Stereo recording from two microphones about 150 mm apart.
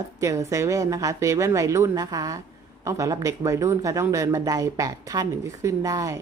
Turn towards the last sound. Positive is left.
turn(degrees=-20)  # may be behind; listen again after turning